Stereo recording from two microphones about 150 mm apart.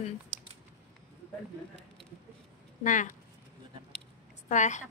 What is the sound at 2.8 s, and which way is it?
Speech, 60° left (ahead or behind).